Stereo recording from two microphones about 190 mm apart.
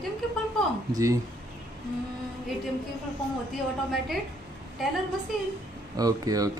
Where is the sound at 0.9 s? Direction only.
15° right (ahead or behind).